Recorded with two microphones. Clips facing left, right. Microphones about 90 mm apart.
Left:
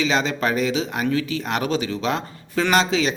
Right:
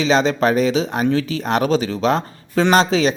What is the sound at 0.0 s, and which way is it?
Speech, 35° right (ahead or behind).